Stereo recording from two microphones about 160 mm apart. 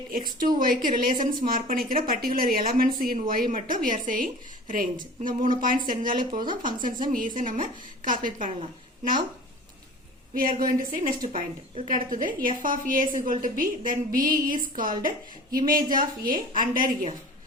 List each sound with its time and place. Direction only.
0.1 s speech: 60° right (ahead or behind)
10.6 s speech: 60° right (ahead or behind)